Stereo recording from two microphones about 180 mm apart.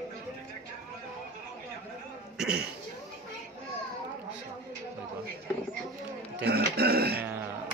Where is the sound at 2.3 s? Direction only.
5° right (ahead or behind).